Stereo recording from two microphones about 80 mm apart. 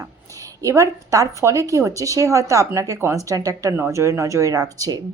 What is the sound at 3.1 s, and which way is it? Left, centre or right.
A woman's voice, right.